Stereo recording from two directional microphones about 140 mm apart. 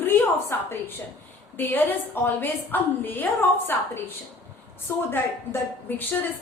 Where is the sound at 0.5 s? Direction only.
15° left (ahead or behind).